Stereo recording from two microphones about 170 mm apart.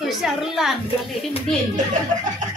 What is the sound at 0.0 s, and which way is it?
Speech, centre (ahead or behind).